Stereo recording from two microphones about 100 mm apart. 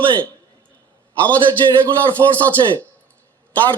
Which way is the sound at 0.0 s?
55° right (ahead or behind).